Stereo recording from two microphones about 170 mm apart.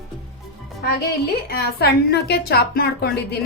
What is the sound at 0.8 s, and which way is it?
Speech, 65° left (ahead or behind).